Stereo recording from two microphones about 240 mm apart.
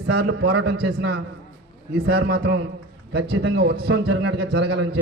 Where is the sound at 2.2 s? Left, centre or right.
Right.